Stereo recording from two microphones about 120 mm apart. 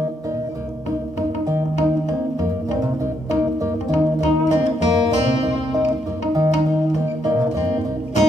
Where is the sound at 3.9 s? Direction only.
75° left (ahead or behind).